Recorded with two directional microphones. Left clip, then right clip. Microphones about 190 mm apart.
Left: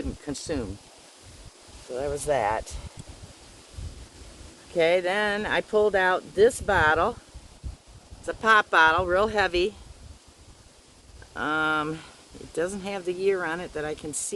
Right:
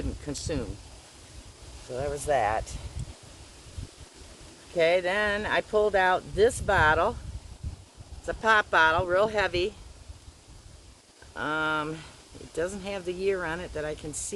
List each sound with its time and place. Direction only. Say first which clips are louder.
0.3 s speech: left 2 dB; 40° left (ahead or behind)
2.0 s speech: left 1 dB; 45° left (ahead or behind)
4.8 s speech: left 1 dB; 55° left (ahead or behind)
8.3 s speech: left 3 dB; 60° left (ahead or behind)
11.3 s speech: left 3 dB; 55° left (ahead or behind)